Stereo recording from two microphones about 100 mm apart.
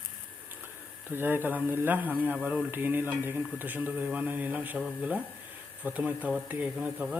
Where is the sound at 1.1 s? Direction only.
20° right (ahead or behind).